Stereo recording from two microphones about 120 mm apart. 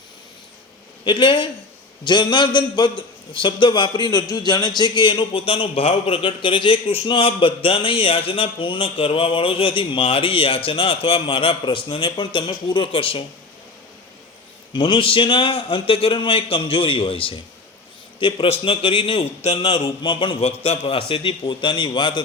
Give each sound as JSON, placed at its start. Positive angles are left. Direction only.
{"t": 1.0, "sound": "a man's voice", "side_deg": 45}
{"t": 14.7, "sound": "a man's voice", "side_deg": 45}